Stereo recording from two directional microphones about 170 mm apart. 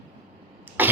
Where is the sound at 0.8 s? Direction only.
10° right (ahead or behind).